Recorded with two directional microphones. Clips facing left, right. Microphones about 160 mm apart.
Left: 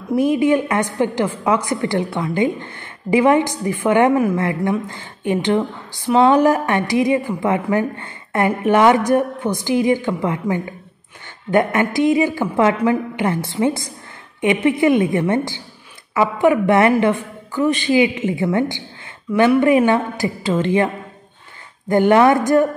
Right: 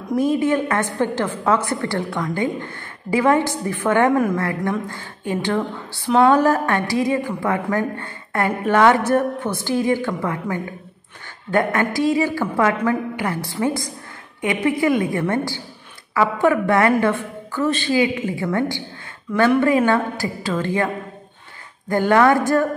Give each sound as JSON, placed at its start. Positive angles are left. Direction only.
{"t": 0.1, "sound": "a woman's voice", "side_deg": 15}